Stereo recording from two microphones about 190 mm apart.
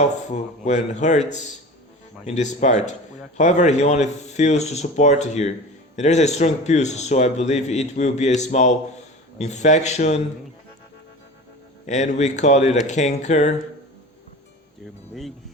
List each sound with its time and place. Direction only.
0.3 s a man's voice: 35° left (ahead or behind)
11.9 s a man's voice: 40° left (ahead or behind)